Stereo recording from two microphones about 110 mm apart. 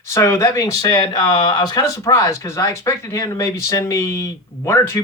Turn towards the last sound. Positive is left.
turn(degrees=25)  # may be behind; listen again after turning